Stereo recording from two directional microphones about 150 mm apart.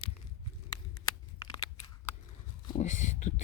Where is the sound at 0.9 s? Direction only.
25° left (ahead or behind).